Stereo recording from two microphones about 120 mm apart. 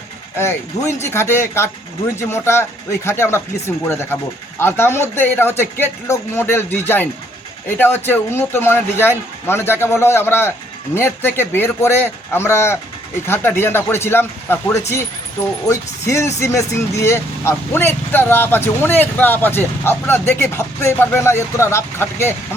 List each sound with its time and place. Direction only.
0.3 s speech: 20° left (ahead or behind)